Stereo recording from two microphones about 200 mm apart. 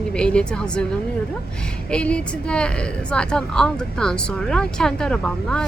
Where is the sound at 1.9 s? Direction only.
5° left (ahead or behind).